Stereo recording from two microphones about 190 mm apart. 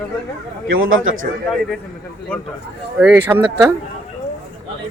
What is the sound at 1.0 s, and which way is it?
Speech, 45° right (ahead or behind).